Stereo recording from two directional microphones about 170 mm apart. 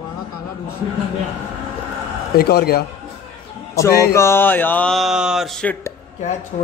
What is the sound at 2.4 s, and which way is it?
Speech, 70° left (ahead or behind).